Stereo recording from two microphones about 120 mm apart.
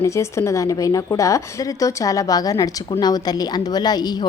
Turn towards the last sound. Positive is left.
turn(degrees=35)  # may be behind; listen again after turning